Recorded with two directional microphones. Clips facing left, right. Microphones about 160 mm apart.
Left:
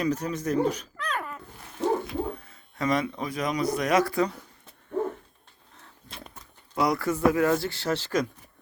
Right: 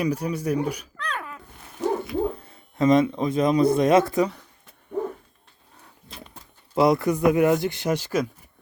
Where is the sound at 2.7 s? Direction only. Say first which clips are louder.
Right 8 dB; 25° right (ahead or behind).